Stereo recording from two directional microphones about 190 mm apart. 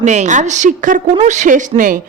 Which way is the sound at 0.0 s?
40° right (ahead or behind).